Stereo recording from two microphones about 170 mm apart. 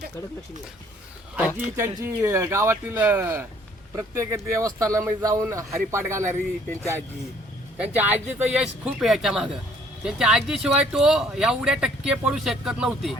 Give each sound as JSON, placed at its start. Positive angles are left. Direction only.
{"t": 1.4, "sound": "speech", "side_deg": -10}
{"t": 7.8, "sound": "speech", "side_deg": -10}